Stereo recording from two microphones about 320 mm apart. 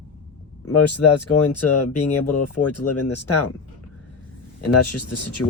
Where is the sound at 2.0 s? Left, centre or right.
Centre.